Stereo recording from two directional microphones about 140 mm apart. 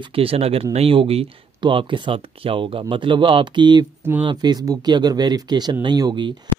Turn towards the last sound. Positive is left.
turn(degrees=-35)  # may be behind; listen again after turning